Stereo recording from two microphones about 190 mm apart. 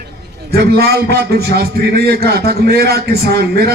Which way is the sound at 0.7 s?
55° right (ahead or behind).